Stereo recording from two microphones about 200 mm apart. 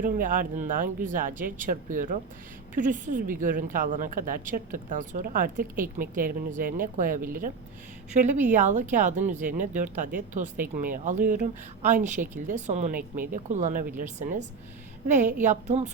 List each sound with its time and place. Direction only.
0.0 s a woman's voice: 45° right (ahead or behind)
8.6 s speech: 35° right (ahead or behind)